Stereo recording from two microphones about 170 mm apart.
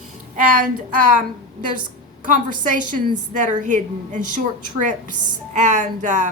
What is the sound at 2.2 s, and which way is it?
A woman's voice, 50° right (ahead or behind).